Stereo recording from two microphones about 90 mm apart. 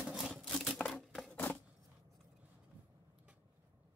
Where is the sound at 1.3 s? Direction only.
20° left (ahead or behind).